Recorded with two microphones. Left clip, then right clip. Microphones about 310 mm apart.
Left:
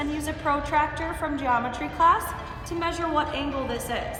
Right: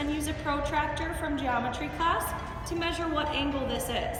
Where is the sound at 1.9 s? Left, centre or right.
Centre.